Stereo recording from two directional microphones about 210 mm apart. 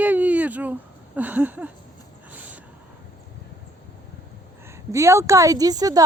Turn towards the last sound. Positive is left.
turn(degrees=-15)  # may be behind; listen again after turning